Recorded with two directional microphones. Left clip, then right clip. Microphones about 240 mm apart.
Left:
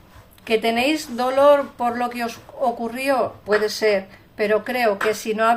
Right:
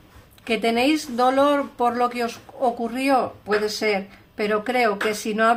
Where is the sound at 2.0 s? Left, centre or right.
Right.